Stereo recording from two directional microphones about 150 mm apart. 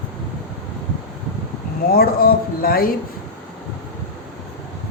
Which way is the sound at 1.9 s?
85° left.